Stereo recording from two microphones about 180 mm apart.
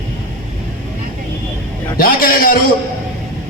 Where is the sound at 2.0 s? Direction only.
55° left (ahead or behind).